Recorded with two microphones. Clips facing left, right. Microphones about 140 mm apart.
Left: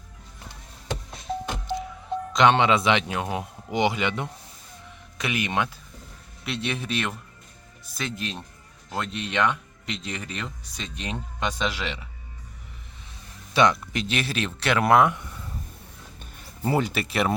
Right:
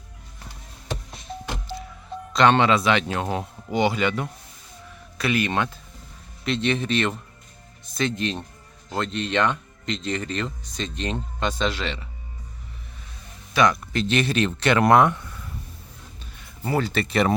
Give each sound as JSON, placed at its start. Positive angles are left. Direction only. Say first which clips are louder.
{"t": 2.3, "sound": "speech", "louder": "right 1 dB", "side_deg": 15}
{"t": 13.5, "sound": "speech", "louder": "even", "side_deg": 25}
{"t": 13.9, "sound": "speech", "louder": "right 5 dB", "side_deg": 10}
{"t": 16.4, "sound": "a sound", "louder": "even", "side_deg": 25}
{"t": 16.9, "sound": "speech", "louder": "right 3 dB", "side_deg": 5}